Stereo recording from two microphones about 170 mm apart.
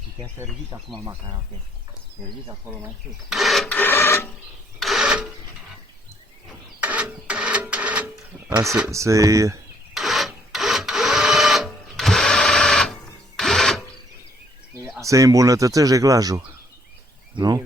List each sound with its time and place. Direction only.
0.9 s speech: 25° right (ahead or behind)
2.6 s speech: 10° right (ahead or behind)
3.3 s printer: centre (ahead or behind)
4.8 s sewing machine: centre (ahead or behind)
6.7 s printer: 10° right (ahead or behind)
8.4 s speech: 20° right (ahead or behind)
9.9 s printer: centre (ahead or behind)
15.0 s speech: 20° right (ahead or behind)